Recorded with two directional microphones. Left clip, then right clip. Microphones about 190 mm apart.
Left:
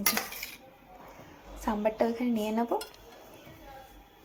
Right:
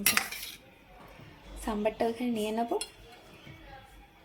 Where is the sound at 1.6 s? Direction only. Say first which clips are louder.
Left 2 dB; 5° right (ahead or behind).